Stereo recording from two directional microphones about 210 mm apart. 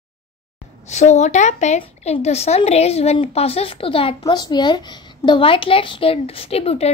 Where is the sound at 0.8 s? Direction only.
35° left (ahead or behind).